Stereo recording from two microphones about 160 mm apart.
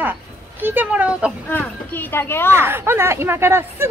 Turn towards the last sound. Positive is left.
turn(degrees=-15)  # may be behind; listen again after turning